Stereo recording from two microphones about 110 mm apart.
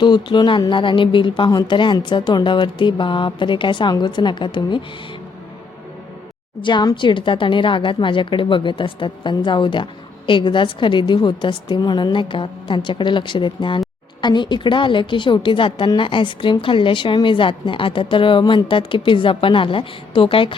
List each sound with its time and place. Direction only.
0.0 s a woman's voice: 45° left (ahead or behind)
6.6 s a woman's voice: 45° left (ahead or behind)